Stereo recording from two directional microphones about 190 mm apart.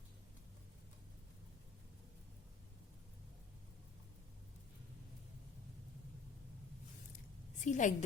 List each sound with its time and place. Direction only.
7.6 s a woman's voice: 40° left (ahead or behind)